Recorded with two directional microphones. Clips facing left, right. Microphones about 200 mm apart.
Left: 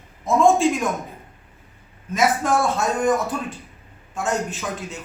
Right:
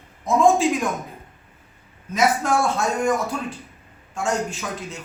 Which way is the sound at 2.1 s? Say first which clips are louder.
Even; centre (ahead or behind).